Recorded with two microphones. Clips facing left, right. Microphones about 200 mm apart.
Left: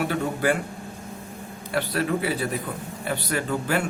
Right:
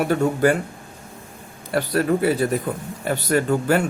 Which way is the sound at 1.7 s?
45° right (ahead or behind).